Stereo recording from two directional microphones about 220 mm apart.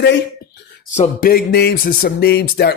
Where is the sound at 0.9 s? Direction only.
35° left (ahead or behind).